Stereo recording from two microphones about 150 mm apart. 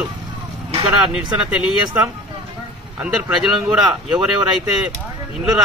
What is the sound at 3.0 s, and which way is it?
Speech, 5° right (ahead or behind).